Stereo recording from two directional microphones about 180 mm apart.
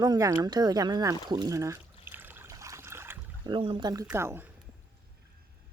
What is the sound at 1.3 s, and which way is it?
Trickle, 20° right (ahead or behind).